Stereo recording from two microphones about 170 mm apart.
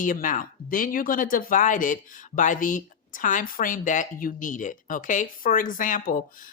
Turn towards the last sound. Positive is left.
turn(degrees=50)  # may be behind; listen again after turning